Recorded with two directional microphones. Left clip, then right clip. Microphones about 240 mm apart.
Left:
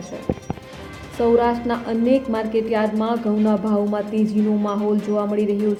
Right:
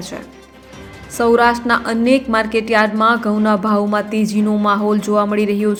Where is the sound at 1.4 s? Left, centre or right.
Centre.